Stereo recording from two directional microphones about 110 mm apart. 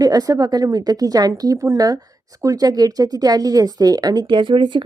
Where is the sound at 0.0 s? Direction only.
35° right (ahead or behind).